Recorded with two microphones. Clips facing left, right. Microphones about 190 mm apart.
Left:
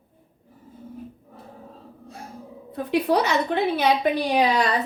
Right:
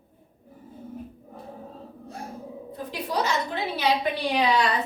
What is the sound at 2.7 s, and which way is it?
A woman's voice, 65° left (ahead or behind).